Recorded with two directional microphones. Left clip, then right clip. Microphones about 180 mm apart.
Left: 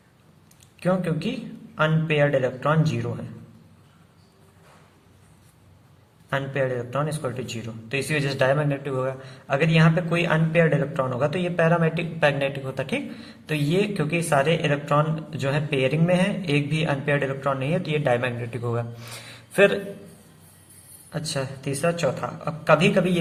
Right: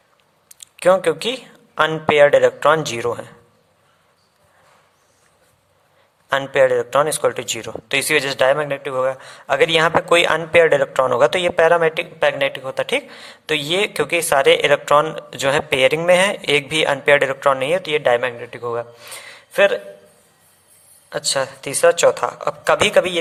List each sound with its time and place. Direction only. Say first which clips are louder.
0.6 s a man's voice: right 11 dB; 50° right (ahead or behind)
6.3 s a man's voice: right 10 dB; 50° right (ahead or behind); by 19.8 s 30° right (ahead or behind)
21.1 s a man's voice: right 9 dB; 45° right (ahead or behind)